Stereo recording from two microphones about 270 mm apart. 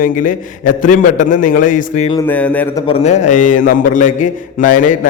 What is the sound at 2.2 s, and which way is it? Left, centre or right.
Speech, centre.